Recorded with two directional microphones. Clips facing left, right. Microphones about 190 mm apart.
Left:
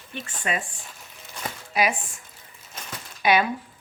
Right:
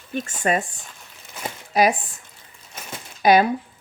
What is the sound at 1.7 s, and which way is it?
Speech, 40° right (ahead or behind).